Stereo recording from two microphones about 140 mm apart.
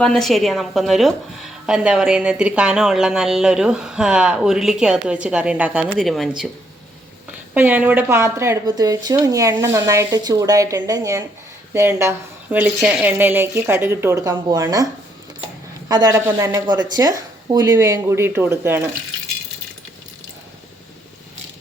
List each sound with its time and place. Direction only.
0.0 s a woman's voice: 5° left (ahead or behind)
6.1 s a woman's voice: centre (ahead or behind)
7.5 s a woman's voice: 10° right (ahead or behind)
15.9 s speech: 30° right (ahead or behind)
16.1 s a woman's voice: 15° right (ahead or behind)
16.5 s speech: 30° right (ahead or behind)